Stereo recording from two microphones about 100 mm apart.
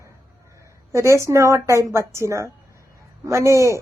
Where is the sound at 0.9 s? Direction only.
30° right (ahead or behind).